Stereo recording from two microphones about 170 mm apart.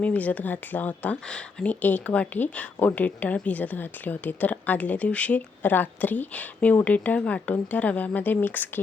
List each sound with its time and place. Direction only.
0.0 s speech: 10° left (ahead or behind)